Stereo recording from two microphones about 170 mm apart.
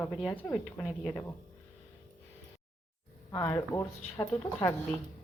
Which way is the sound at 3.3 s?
15° left (ahead or behind).